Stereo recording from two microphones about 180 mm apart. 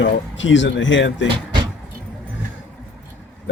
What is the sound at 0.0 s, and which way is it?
A man's voice, 90° left.